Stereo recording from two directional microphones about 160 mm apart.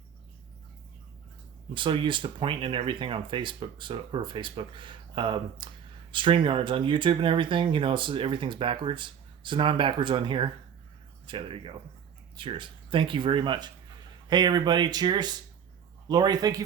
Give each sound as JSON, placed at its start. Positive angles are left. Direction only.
{"t": 1.7, "sound": "speech", "side_deg": -30}